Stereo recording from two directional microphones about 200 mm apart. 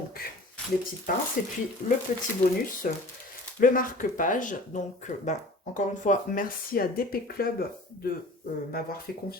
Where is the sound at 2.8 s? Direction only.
40° left (ahead or behind).